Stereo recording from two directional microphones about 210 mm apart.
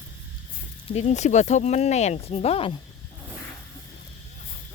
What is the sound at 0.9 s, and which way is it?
Speech, 30° left (ahead or behind).